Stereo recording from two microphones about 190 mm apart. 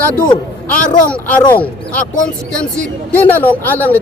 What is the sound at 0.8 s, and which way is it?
Speech, 45° left (ahead or behind).